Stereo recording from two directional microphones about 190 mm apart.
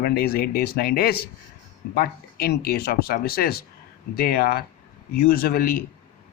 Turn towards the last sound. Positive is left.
turn(degrees=50)  # may be behind; listen again after turning